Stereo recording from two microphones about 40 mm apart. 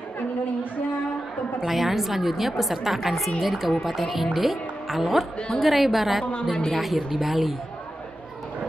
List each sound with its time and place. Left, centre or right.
1.7 s a woman's voice: centre
6.5 s speech: centre
7.1 s a woman's voice: centre